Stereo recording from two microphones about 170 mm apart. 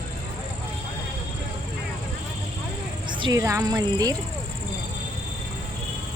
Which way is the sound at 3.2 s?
20° right (ahead or behind).